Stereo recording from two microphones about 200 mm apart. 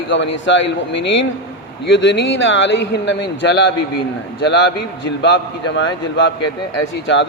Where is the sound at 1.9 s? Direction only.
65° left (ahead or behind).